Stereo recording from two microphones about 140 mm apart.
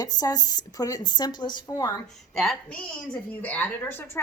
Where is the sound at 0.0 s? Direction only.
30° left (ahead or behind).